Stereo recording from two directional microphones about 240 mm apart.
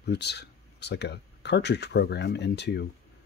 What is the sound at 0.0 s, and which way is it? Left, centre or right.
Speech, left.